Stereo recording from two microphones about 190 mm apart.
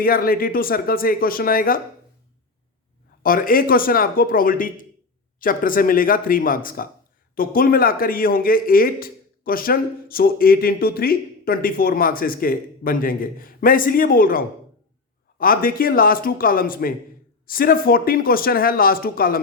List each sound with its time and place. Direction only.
0.0 s speech: 50° left (ahead or behind)
3.2 s speech: 50° left (ahead or behind)